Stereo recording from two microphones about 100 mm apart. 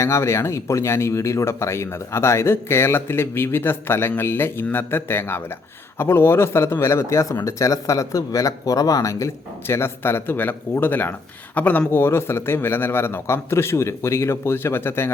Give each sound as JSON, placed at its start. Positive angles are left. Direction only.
{"t": 0.0, "sound": "speech", "side_deg": 25}